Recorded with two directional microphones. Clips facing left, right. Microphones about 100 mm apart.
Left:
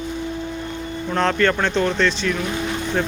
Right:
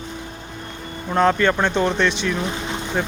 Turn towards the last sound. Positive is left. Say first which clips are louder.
# left 2 dB
turn(degrees=-10)  # may be behind; listen again after turning